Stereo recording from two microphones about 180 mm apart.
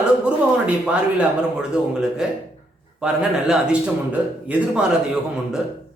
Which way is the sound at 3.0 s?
5° right (ahead or behind).